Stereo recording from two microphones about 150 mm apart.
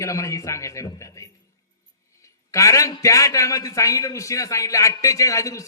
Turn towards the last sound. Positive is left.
turn(degrees=20)  # may be behind; listen again after turning